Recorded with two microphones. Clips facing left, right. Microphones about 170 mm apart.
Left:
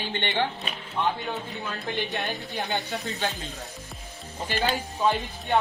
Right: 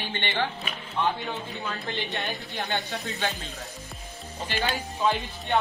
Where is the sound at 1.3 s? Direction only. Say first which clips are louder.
Even; centre (ahead or behind).